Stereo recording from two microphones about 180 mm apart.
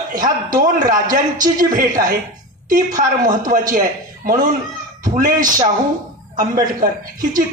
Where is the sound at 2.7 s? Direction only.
50° right (ahead or behind).